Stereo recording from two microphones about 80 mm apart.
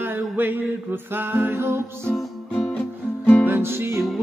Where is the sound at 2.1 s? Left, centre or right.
Centre.